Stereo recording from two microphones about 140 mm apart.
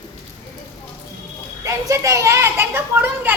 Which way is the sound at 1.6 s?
20° right (ahead or behind).